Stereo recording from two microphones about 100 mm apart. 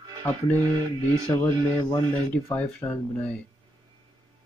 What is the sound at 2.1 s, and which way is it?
Speech, 15° left (ahead or behind).